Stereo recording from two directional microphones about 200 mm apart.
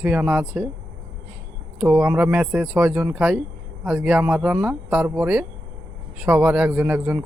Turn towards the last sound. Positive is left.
turn(degrees=-10)  # may be behind; listen again after turning